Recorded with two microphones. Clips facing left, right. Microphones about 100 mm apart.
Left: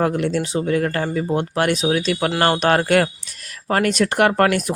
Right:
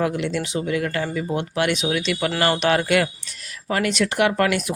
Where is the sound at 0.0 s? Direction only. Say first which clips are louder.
Left 3 dB; 45° left (ahead or behind).